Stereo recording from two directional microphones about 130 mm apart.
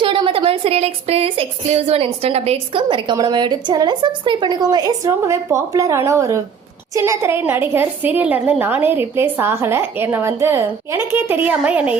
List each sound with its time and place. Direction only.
0.0 s a woman's voice: 40° right (ahead or behind); by 11.9 s 10° right (ahead or behind)